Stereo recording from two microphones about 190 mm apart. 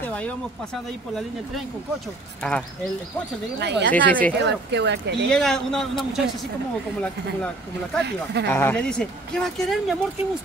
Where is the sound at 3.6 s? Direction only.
65° right (ahead or behind).